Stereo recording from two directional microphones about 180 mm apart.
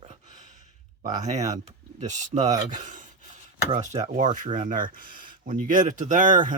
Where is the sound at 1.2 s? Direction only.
40° right (ahead or behind).